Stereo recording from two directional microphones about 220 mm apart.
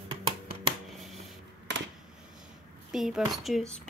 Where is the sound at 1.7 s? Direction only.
55° right (ahead or behind).